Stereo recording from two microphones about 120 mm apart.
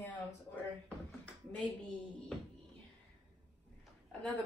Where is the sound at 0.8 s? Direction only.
5° left (ahead or behind).